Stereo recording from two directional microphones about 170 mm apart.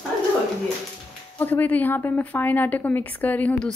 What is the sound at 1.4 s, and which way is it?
A woman's voice, 10° left (ahead or behind).